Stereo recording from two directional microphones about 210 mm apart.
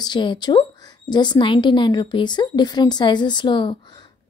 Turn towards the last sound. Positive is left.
turn(degrees=20)  # may be behind; listen again after turning